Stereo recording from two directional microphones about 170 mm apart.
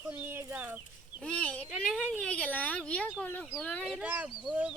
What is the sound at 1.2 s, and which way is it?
A child's voice, 5° left (ahead or behind).